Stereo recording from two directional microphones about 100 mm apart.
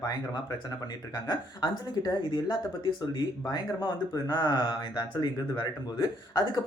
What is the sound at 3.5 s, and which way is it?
Speech, 40° left (ahead or behind).